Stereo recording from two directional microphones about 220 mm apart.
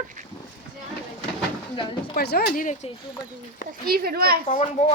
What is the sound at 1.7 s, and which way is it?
Speech, 20° left (ahead or behind).